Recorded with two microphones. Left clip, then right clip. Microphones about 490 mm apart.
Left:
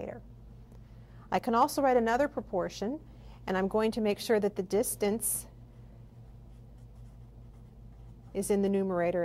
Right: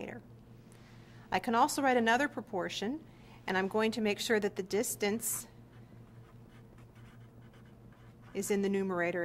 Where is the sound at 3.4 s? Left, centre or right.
Left.